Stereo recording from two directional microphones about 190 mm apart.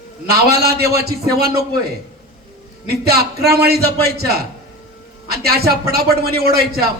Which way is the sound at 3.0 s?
55° right (ahead or behind).